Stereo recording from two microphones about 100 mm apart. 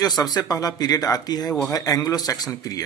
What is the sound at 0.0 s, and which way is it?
Speech, 40° left (ahead or behind).